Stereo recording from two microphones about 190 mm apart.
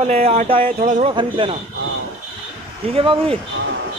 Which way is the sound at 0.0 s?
35° right (ahead or behind).